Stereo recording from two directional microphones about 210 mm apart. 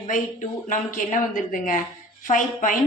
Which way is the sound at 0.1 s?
40° left (ahead or behind).